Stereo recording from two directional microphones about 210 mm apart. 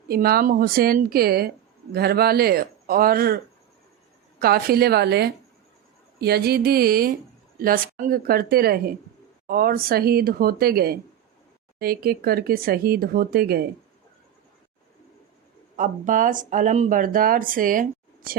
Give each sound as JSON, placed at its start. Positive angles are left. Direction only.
{"t": 0.1, "sound": "speech", "side_deg": -45}
{"t": 15.7, "sound": "speech", "side_deg": -40}